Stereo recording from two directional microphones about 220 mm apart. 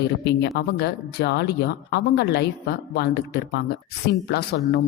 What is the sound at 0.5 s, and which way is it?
Speech, 50° left (ahead or behind).